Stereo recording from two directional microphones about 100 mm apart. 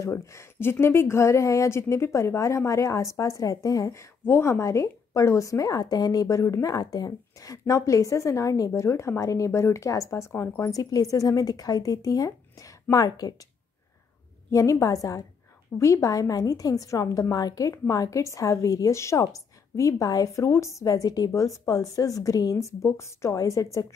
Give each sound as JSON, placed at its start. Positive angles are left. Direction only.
{"t": 0.0, "sound": "a woman's voice", "side_deg": 30}
{"t": 14.5, "sound": "a woman's voice", "side_deg": 30}